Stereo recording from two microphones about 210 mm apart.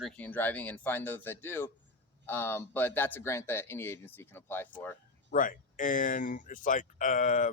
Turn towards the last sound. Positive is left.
turn(degrees=40)  # may be behind; listen again after turning